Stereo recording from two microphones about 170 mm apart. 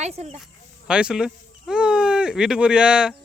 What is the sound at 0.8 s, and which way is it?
Speech, 5° right (ahead or behind).